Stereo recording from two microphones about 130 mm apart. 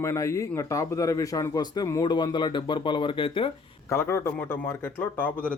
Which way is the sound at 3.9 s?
20° left (ahead or behind).